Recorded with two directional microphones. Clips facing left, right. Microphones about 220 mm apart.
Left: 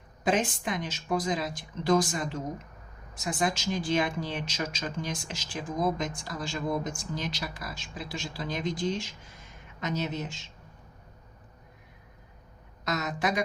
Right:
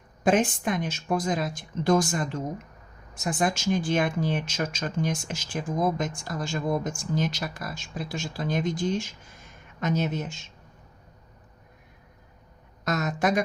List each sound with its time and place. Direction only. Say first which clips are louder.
0.3 s speech: right 5 dB; 50° right (ahead or behind)
12.8 s speech: right 4 dB; 50° right (ahead or behind)